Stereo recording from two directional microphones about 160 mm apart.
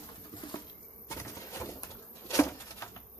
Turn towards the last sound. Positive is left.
turn(degrees=15)  # may be behind; listen again after turning